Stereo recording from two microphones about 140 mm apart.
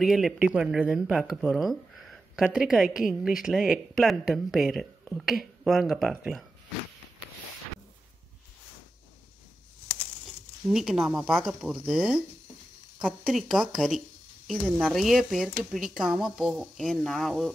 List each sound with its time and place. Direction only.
0.0 s speech: centre (ahead or behind)
10.7 s speech: centre (ahead or behind)